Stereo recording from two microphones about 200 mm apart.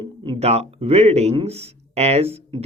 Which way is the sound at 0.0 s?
25° right (ahead or behind).